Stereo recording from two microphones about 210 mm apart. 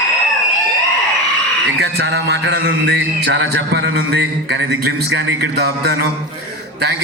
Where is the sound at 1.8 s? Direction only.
55° right (ahead or behind).